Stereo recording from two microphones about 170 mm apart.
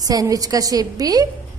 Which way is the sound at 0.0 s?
20° right (ahead or behind).